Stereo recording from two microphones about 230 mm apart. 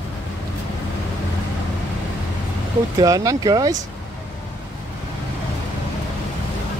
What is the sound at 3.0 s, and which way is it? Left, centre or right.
Speech, centre.